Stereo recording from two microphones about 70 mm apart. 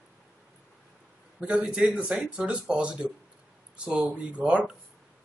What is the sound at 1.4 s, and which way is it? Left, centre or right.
A woman's voice, centre.